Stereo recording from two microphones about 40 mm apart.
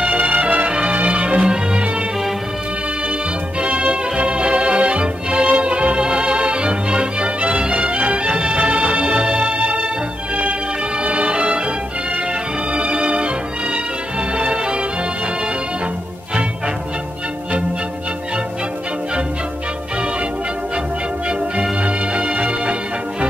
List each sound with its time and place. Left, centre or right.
0.0 s music: right
0.7 s music: right
3.6 s music: right
11.1 s music: right
12.7 s music: right
21.3 s music: right